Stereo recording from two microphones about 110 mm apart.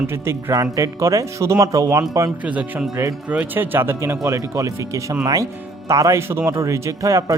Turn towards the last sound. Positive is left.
turn(degrees=-30)  # may be behind; listen again after turning